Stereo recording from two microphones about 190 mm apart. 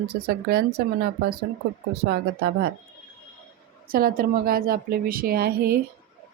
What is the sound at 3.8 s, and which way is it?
A woman's voice, 50° right (ahead or behind).